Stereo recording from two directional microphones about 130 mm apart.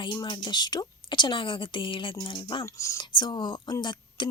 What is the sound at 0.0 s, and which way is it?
A woman's voice, 35° left (ahead or behind).